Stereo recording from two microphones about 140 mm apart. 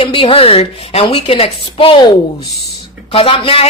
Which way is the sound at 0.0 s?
40° left (ahead or behind).